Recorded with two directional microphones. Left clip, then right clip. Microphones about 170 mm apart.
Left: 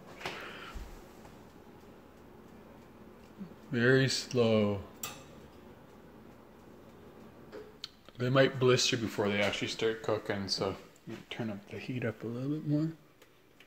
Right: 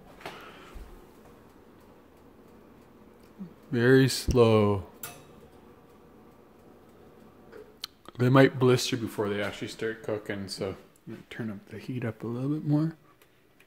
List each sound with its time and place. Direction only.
3.7 s speech: 40° right (ahead or behind); by 4.7 s 65° right (ahead or behind)
7.8 s speech: 60° right (ahead or behind); by 10.3 s 25° right (ahead or behind)
11.2 s speech: 45° right (ahead or behind)